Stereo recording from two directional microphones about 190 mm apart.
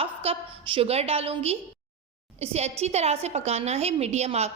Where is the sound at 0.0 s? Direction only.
30° right (ahead or behind).